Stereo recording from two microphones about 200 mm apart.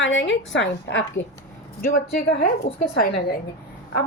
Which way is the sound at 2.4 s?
45° left (ahead or behind).